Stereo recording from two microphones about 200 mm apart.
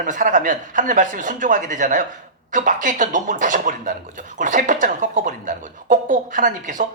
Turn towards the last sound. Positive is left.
turn(degrees=-40)  # may be behind; listen again after turning